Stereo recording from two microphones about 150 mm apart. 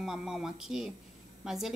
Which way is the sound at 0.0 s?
5° right (ahead or behind).